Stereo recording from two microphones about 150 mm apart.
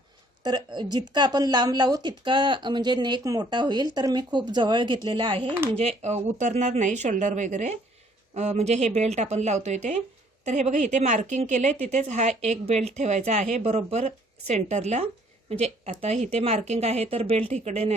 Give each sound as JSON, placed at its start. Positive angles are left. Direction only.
{"t": 0.4, "sound": "a woman's voice", "side_deg": -30}
{"t": 6.0, "sound": "a woman's voice", "side_deg": -50}